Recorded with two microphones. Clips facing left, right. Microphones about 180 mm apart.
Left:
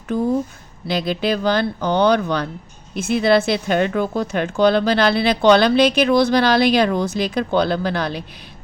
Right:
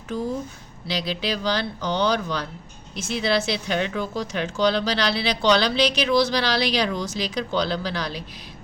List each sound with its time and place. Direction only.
0.1 s speech: 55° left (ahead or behind)